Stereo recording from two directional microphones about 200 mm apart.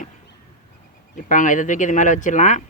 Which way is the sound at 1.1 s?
40° left (ahead or behind).